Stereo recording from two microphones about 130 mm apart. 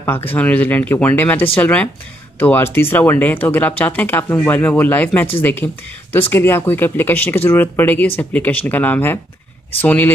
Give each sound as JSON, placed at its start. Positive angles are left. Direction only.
{"t": 0.0, "sound": "speech", "side_deg": 15}